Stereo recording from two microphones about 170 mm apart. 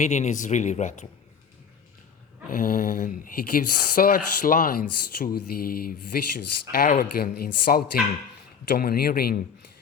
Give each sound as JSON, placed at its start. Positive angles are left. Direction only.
{"t": 0.0, "sound": "speech", "side_deg": 45}
{"t": 2.5, "sound": "speech", "side_deg": 55}